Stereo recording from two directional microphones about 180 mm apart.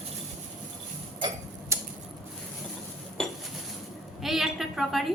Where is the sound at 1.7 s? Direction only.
15° right (ahead or behind).